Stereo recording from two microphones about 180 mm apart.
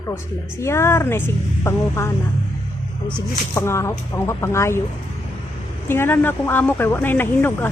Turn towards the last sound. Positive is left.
turn(degrees=10)  # may be behind; listen again after turning